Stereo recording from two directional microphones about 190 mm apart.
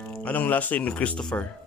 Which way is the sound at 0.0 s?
10° left (ahead or behind).